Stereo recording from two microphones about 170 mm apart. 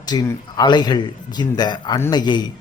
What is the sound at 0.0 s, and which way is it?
Speech, 25° left (ahead or behind).